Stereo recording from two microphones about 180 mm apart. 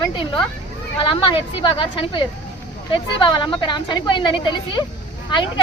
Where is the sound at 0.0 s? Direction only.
25° left (ahead or behind).